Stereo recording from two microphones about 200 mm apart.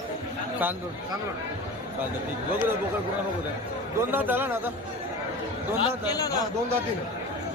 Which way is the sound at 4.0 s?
10° right (ahead or behind).